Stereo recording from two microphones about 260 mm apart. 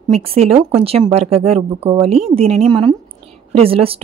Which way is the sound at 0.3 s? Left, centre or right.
Right.